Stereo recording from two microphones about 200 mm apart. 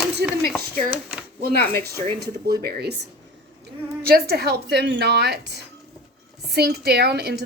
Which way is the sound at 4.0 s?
50° right (ahead or behind).